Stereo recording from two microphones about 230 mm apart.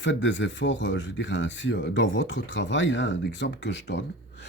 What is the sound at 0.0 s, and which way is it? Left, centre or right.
Speech, left.